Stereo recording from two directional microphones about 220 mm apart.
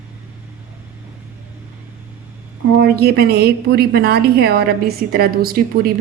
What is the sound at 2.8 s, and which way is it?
A woman's voice, 45° right (ahead or behind).